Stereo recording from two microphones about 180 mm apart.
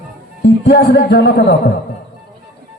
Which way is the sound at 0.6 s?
60° left (ahead or behind).